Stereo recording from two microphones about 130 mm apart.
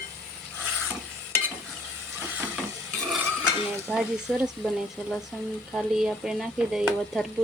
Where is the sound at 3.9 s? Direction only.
5° right (ahead or behind).